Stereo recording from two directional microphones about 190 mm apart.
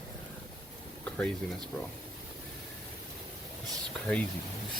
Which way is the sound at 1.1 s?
5° left (ahead or behind).